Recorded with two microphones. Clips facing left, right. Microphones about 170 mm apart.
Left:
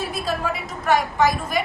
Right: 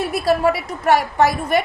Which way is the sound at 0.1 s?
70° right (ahead or behind).